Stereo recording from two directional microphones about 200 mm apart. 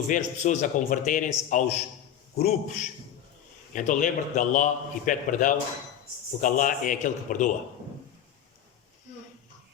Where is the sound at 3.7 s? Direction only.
40° left (ahead or behind).